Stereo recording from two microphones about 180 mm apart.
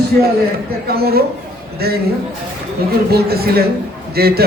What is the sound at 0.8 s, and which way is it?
A man's voice, 60° right (ahead or behind).